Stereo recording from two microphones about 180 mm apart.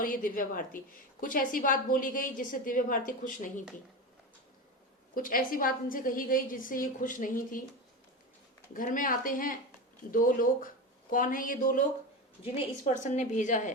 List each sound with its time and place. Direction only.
0.0 s a woman's voice: 50° left (ahead or behind)
5.1 s a woman's voice: 50° left (ahead or behind)
8.7 s a woman's voice: 50° left (ahead or behind)
12.8 s a woman's voice: 40° left (ahead or behind)